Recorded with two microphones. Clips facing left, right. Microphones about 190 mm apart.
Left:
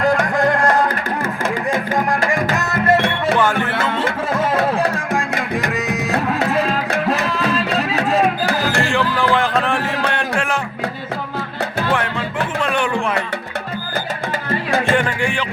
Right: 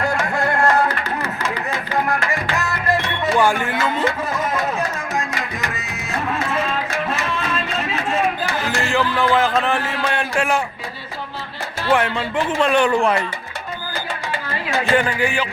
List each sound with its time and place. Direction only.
0.3 s music: 15° left (ahead or behind)
2.6 s music: 20° left (ahead or behind)
2.9 s music: 65° left (ahead or behind)
3.3 s speech: 10° right (ahead or behind)
4.8 s music: 55° left (ahead or behind)
7.5 s music: 35° left (ahead or behind)
8.2 s music: 60° left (ahead or behind)
8.8 s music: centre (ahead or behind)
9.6 s speech: centre (ahead or behind)
10.1 s music: 5° right (ahead or behind)
12.7 s a man's voice: 35° right (ahead or behind)
14.9 s speech: 5° right (ahead or behind)